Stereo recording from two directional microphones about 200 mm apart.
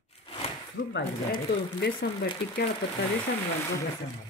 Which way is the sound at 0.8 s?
45° left (ahead or behind).